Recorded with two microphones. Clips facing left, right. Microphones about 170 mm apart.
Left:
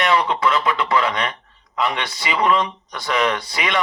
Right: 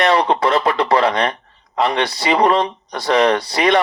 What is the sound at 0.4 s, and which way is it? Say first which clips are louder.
A man's voice: right 4 dB; 35° right (ahead or behind).